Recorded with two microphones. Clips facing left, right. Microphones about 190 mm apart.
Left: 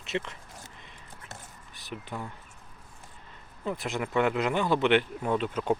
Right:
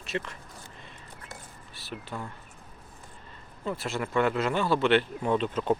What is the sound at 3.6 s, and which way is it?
Speech, 15° left (ahead or behind).